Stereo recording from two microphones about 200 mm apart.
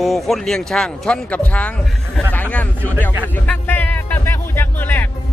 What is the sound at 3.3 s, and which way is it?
Music, 10° left (ahead or behind).